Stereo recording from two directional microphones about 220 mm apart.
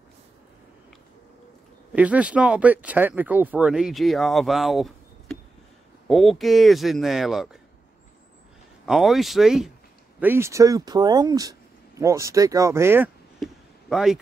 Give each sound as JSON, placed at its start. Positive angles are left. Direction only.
{"t": 1.9, "sound": "speech", "side_deg": -5}
{"t": 8.8, "sound": "speech", "side_deg": 0}